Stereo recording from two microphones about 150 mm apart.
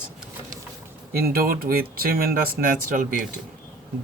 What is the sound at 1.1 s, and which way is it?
Speech, 90° right.